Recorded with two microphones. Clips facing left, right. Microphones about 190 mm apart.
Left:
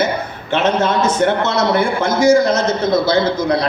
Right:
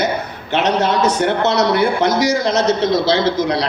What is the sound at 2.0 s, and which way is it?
A man's voice, 50° left (ahead or behind).